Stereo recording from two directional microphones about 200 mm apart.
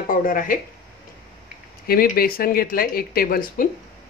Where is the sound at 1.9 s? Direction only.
50° left (ahead or behind).